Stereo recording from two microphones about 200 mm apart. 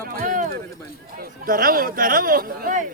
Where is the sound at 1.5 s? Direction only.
45° right (ahead or behind).